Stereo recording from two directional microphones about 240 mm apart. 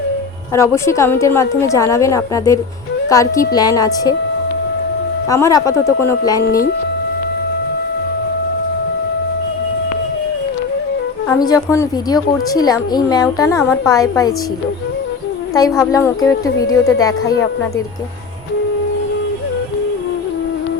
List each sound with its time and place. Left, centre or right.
0.5 s a woman's voice: centre
5.3 s a woman's voice: centre
6.4 s speech: left
11.3 s a woman's voice: centre
15.5 s a woman's voice: centre